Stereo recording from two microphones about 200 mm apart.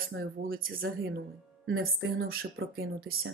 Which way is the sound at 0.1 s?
45° right (ahead or behind).